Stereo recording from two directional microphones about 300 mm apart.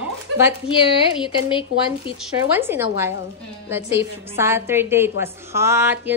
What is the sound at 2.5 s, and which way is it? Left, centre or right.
A woman's voice, centre.